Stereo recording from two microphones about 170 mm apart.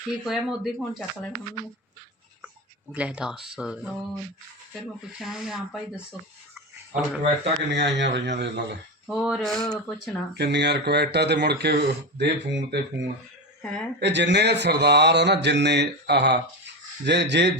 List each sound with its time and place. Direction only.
0.3 s speech: centre (ahead or behind)
2.9 s speech: 5° right (ahead or behind)
6.5 s a sound: 5° right (ahead or behind)
7.7 s a man's voice: 90° right
9.0 s speech: centre (ahead or behind)
10.3 s speech: 80° right
13.6 s speech: 10° left (ahead or behind)
14.0 s speech: 90° right
17.1 s a man's voice: 90° right